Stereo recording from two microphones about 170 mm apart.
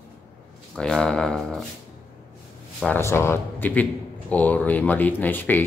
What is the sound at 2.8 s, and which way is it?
Speech, 15° left (ahead or behind).